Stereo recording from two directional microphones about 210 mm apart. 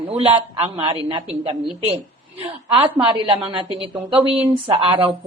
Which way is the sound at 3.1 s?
25° right (ahead or behind).